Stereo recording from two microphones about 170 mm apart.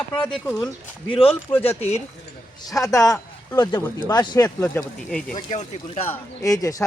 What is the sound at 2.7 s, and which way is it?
Speech, 20° left (ahead or behind).